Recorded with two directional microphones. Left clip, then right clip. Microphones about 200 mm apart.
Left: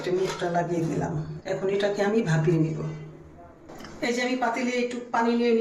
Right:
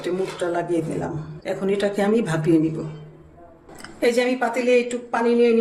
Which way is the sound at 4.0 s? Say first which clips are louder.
Right 6 dB; 60° right (ahead or behind).